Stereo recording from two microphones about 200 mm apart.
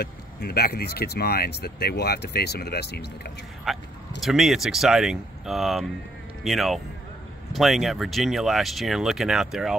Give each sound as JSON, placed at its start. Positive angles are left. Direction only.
{"t": 0.0, "sound": "speech", "side_deg": 50}
{"t": 3.7, "sound": "speech", "side_deg": 0}